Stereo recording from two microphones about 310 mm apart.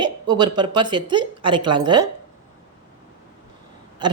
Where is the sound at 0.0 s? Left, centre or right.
Centre.